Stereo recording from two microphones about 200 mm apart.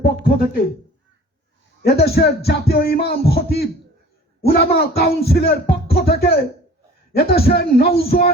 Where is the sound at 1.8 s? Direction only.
50° left (ahead or behind).